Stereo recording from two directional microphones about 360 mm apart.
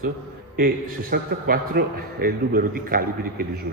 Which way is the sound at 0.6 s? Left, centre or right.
Right.